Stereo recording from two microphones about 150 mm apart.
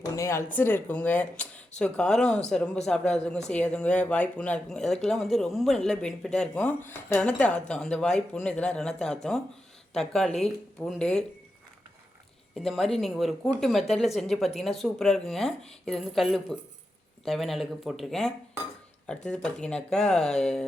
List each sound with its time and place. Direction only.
0.2 s speech: 20° left (ahead or behind)
12.5 s speech: centre (ahead or behind)